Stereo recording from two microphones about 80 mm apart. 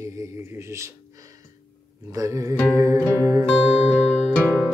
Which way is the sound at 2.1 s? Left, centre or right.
Right.